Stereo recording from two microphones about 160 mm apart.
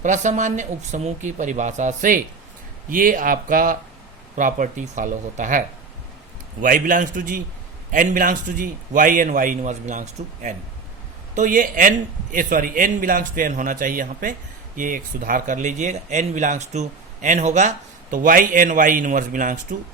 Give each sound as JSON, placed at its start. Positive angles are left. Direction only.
{"t": 0.0, "sound": "a man's voice", "side_deg": -50}